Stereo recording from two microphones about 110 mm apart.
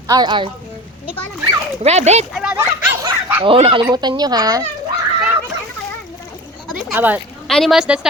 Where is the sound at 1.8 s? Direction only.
85° right.